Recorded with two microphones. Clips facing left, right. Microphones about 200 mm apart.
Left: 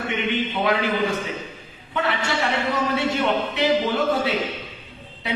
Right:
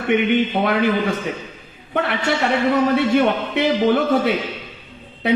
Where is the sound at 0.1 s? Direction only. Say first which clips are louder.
Right 10 dB; 55° right (ahead or behind).